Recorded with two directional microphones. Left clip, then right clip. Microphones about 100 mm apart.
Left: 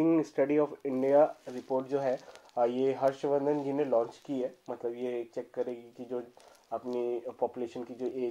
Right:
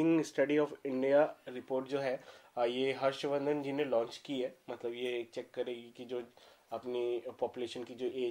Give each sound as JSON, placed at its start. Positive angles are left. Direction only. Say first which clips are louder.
{"t": 0.0, "sound": "a sound", "louder": "left 3 dB", "side_deg": 20}
{"t": 0.4, "sound": "speech", "louder": "left 3 dB", "side_deg": 15}
{"t": 2.0, "sound": "speech", "louder": "left 5 dB", "side_deg": 25}
{"t": 3.4, "sound": "speech", "louder": "left 4 dB", "side_deg": 15}
{"t": 7.6, "sound": "speech", "louder": "left 3 dB", "side_deg": 30}